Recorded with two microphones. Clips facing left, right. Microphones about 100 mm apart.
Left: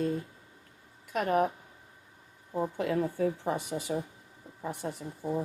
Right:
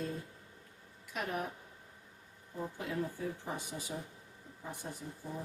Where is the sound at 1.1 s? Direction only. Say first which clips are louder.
Left 11 dB; 55° left (ahead or behind).